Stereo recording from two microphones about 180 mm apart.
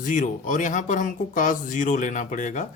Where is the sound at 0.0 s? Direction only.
45° left (ahead or behind).